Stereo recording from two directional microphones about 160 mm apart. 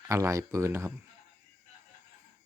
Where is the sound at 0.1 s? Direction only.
20° right (ahead or behind).